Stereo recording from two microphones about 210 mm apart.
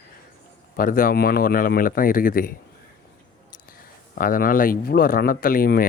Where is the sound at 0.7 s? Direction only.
40° left (ahead or behind).